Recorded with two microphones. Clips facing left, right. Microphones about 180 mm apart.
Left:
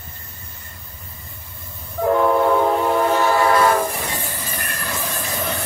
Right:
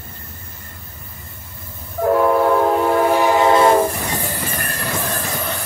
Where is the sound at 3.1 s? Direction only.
15° right (ahead or behind).